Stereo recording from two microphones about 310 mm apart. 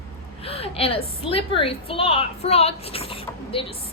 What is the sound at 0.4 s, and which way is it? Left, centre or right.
A woman's voice, centre.